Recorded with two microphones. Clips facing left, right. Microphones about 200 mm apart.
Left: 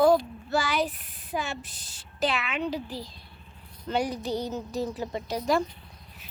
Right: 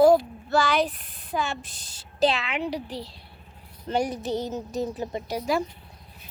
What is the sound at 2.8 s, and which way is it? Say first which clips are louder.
Speech: right 2 dB; 70° right (ahead or behind).